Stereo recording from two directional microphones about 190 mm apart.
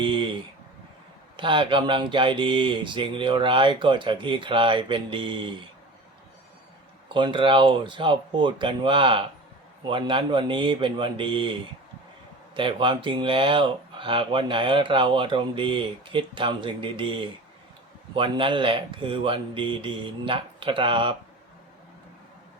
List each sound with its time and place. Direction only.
0.0 s speech: 25° right (ahead or behind)
1.4 s speech: 25° right (ahead or behind)
7.1 s speech: 25° right (ahead or behind)